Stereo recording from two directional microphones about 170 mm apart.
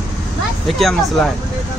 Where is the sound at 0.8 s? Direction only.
Centre (ahead or behind).